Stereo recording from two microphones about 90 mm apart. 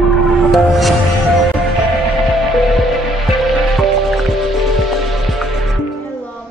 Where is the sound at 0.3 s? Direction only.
Centre (ahead or behind).